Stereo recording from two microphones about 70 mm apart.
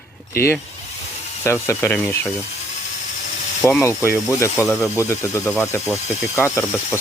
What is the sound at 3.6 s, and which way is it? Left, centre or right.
Speech, left.